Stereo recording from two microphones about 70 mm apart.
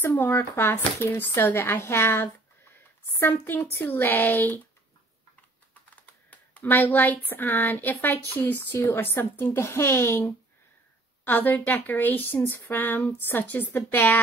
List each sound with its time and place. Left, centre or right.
0.0 s speech: left
6.3 s a woman's voice: left
11.2 s a woman's voice: left